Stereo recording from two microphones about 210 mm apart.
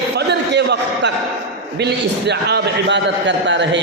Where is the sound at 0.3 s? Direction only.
55° right (ahead or behind).